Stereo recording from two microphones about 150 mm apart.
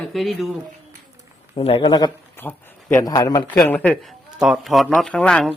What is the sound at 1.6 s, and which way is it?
Speech, 40° left (ahead or behind).